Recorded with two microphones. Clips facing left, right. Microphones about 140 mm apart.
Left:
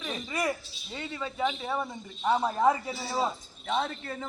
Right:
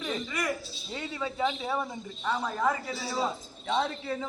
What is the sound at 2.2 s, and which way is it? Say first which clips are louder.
Speech: left 4 dB; 25° left (ahead or behind).